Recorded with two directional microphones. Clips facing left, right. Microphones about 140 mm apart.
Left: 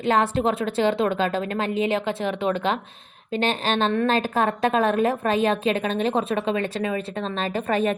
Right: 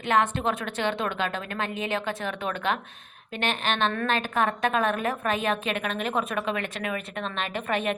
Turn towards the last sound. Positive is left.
turn(degrees=35)  # may be behind; listen again after turning